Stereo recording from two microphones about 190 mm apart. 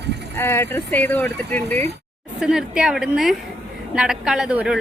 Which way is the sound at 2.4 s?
5° right (ahead or behind).